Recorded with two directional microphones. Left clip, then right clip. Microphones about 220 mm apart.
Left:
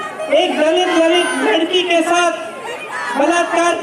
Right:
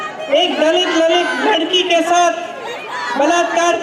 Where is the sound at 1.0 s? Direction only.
45° right (ahead or behind).